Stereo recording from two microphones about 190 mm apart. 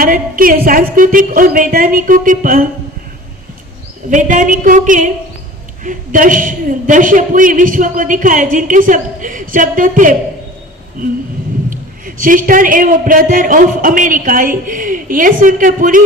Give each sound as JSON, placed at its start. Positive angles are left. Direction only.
{"t": 0.0, "sound": "a man's voice", "side_deg": -50}
{"t": 4.1, "sound": "a man's voice", "side_deg": -40}
{"t": 12.0, "sound": "a man's voice", "side_deg": -45}